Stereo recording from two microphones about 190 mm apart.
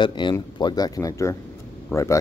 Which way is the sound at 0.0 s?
25° left (ahead or behind).